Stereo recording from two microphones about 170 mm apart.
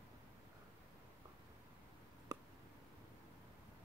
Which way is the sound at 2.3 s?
20° right (ahead or behind).